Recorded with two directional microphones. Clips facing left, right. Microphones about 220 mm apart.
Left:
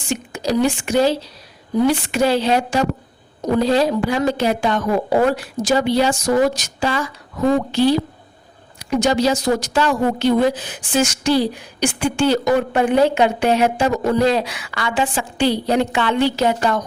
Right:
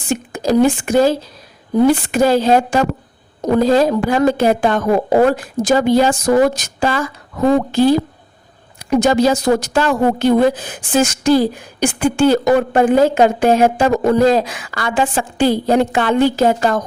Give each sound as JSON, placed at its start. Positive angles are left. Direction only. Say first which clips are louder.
{"t": 0.3, "sound": "a woman's voice", "louder": "right 5 dB", "side_deg": -55}
{"t": 8.9, "sound": "a woman's voice", "louder": "right 4 dB", "side_deg": -55}